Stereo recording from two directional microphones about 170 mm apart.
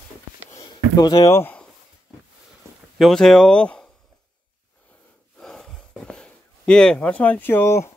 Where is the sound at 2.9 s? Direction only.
Centre (ahead or behind).